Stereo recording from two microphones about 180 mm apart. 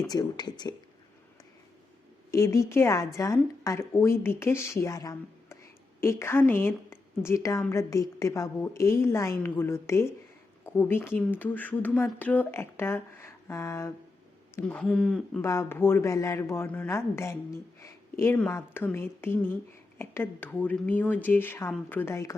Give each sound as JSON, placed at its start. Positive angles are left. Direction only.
{"t": 0.1, "sound": "speech", "side_deg": 20}
{"t": 2.3, "sound": "speech", "side_deg": 15}
{"t": 15.4, "sound": "a woman's voice", "side_deg": 15}